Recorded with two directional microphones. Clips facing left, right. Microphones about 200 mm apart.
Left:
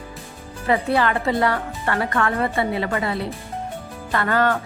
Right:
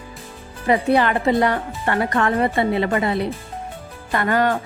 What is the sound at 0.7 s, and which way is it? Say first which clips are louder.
A woman's voice: right 3 dB; 20° right (ahead or behind).